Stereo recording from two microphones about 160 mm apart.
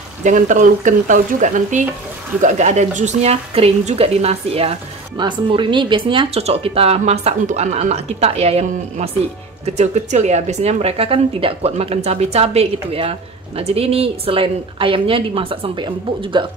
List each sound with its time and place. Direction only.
0.2 s a woman's voice: 50° right (ahead or behind); by 16.4 s 30° right (ahead or behind)